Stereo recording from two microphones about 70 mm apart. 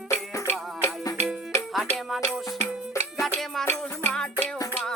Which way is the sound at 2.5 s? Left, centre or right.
Left.